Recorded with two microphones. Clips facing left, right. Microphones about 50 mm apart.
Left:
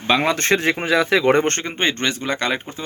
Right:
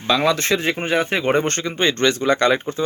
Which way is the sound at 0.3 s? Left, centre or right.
Left.